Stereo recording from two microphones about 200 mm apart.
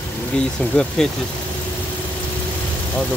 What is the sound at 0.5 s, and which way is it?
Speech, 5° left (ahead or behind).